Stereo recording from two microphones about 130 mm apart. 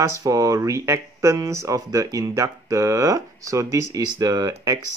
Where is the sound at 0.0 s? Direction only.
25° right (ahead or behind).